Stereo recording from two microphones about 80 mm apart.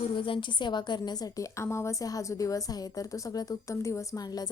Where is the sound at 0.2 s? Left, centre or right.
Left.